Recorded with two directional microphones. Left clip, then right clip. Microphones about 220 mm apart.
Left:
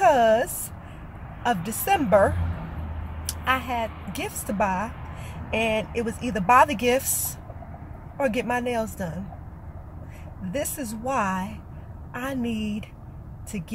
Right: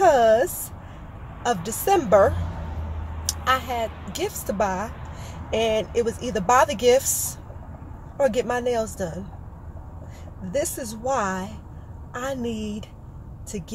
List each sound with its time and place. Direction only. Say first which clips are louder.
0.0 s a sound: right 2 dB; centre (ahead or behind)
1.4 s speech: right 1 dB; centre (ahead or behind)
3.4 s speech: right 2 dB; centre (ahead or behind)
10.5 s speech: right 4 dB; centre (ahead or behind)